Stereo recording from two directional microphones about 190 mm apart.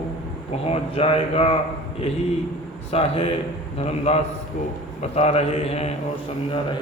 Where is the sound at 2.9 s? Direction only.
30° left (ahead or behind).